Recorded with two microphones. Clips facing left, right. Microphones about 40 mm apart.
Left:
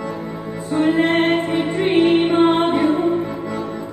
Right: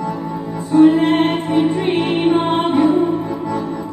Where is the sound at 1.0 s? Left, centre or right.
Centre.